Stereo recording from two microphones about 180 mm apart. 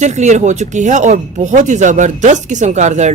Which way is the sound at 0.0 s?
40° right (ahead or behind).